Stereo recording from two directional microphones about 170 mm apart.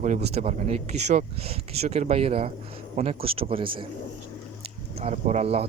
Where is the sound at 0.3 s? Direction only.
40° right (ahead or behind).